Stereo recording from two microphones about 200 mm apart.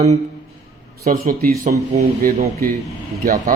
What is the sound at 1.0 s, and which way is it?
Speech, 45° right (ahead or behind).